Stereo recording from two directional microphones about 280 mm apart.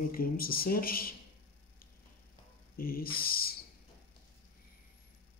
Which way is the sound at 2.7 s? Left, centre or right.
Left.